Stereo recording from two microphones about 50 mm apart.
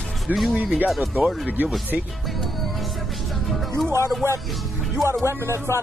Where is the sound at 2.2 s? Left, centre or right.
Centre.